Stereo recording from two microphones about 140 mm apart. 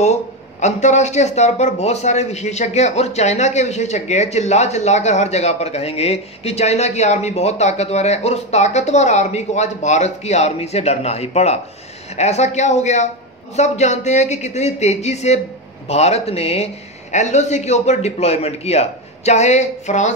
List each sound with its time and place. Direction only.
0.6 s speech: 55° left (ahead or behind)